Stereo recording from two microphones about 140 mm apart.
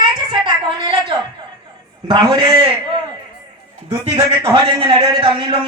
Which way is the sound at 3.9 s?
40° right (ahead or behind).